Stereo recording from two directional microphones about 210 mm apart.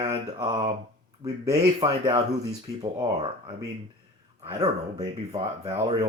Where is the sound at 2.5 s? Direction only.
30° right (ahead or behind).